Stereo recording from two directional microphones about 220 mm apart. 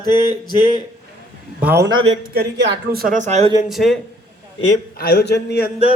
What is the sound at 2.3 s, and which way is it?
Speech, 50° right (ahead or behind).